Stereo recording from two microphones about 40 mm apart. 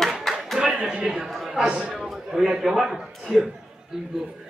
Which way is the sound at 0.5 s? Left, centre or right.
Centre.